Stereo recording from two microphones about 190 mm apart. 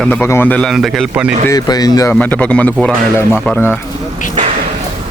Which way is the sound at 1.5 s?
20° left (ahead or behind).